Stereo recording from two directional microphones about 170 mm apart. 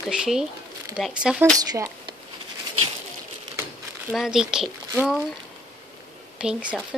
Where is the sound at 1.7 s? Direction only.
25° right (ahead or behind).